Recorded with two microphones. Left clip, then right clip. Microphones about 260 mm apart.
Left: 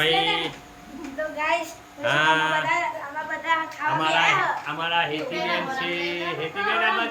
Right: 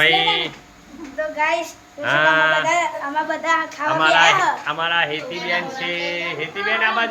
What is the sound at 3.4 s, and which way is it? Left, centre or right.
Speech, centre.